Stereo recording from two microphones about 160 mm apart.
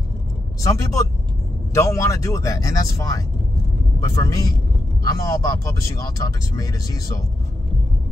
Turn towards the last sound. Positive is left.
turn(degrees=20)  # may be behind; listen again after turning